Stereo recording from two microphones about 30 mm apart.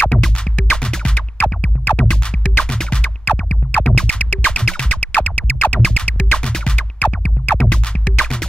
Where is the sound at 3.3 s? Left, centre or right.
Left.